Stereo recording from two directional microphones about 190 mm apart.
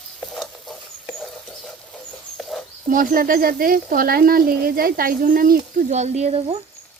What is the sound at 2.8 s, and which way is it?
Speech, 45° right (ahead or behind).